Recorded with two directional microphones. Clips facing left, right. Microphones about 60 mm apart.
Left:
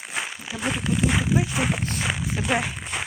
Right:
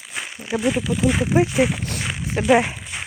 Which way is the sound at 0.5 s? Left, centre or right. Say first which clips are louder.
Right 5 dB; right.